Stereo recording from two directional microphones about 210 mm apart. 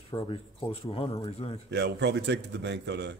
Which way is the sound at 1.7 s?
55° right (ahead or behind).